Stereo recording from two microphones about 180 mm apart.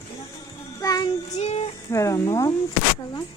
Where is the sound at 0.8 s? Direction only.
20° left (ahead or behind).